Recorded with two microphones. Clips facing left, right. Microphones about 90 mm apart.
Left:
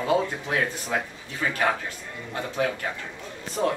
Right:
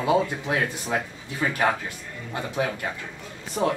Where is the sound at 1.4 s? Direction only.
20° right (ahead or behind).